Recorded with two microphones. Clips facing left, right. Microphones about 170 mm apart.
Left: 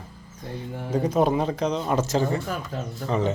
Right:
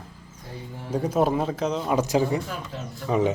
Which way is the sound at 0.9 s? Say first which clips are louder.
Left 1 dB; 10° right (ahead or behind).